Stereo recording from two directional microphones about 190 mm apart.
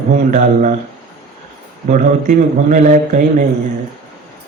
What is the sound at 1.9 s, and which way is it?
A man's voice, 45° right (ahead or behind).